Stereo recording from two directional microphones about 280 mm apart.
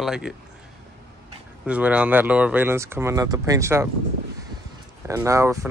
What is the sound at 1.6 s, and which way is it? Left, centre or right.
Speech, centre.